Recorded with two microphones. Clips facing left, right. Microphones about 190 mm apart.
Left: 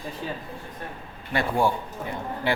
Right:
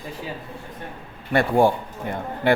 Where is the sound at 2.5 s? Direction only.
55° right (ahead or behind).